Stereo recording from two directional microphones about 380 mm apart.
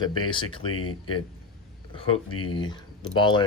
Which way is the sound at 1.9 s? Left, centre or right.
Centre.